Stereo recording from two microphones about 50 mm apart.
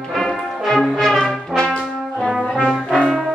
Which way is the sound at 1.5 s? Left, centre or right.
Centre.